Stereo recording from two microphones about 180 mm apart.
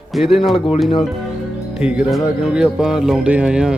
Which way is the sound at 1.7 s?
5° right (ahead or behind).